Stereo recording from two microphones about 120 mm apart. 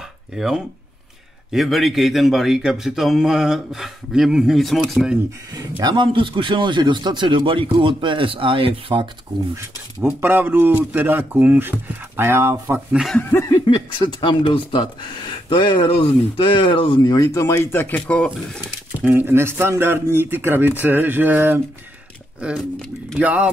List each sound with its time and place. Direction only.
0.3 s a man's voice: 5° right (ahead or behind)
5.5 s speech: 35° right (ahead or behind); by 9.1 s 50° right (ahead or behind)
9.6 s speech: 15° right (ahead or behind)
12.9 s a man's voice: centre (ahead or behind)
13.2 s a sound: 15° left (ahead or behind)
13.7 s speech: 45° left (ahead or behind); by 18.6 s 10° left (ahead or behind)
18.9 s speech: 15° right (ahead or behind)
22.8 s a man's voice: 5° left (ahead or behind)
23.2 s speech: 10° right (ahead or behind)